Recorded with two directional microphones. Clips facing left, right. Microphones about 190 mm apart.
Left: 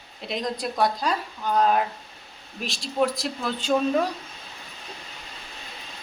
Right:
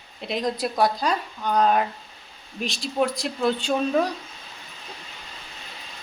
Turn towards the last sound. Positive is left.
turn(degrees=0)  # may be behind; listen again after turning